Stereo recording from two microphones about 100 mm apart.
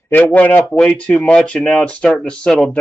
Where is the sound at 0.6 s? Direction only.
Centre (ahead or behind).